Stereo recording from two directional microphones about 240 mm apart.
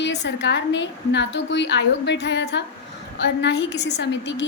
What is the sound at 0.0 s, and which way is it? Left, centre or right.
A woman's voice, left.